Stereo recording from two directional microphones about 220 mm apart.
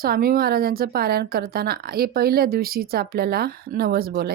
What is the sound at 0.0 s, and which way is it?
Speech, 40° right (ahead or behind).